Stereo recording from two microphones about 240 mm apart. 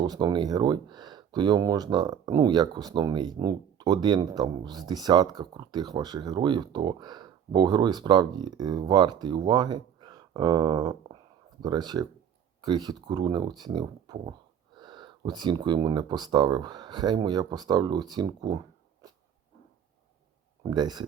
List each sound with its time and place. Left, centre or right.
0.0 s speech: centre
19.0 s dog: centre
20.7 s speech: centre